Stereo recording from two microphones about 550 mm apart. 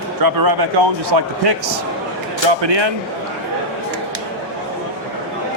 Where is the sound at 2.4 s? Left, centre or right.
Right.